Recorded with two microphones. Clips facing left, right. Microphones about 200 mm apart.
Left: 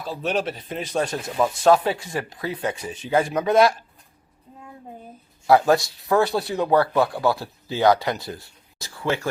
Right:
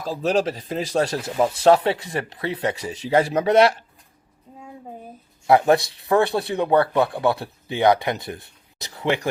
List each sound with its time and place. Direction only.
0.0 s speech: 40° right (ahead or behind)
5.5 s speech: 20° right (ahead or behind)